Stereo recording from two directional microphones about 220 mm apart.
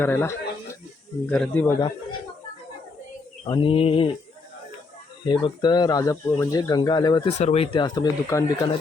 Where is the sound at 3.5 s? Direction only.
25° left (ahead or behind).